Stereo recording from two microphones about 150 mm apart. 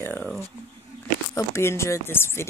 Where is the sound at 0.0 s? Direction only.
10° left (ahead or behind).